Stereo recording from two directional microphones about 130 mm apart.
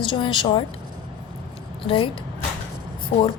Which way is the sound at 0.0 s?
40° left (ahead or behind).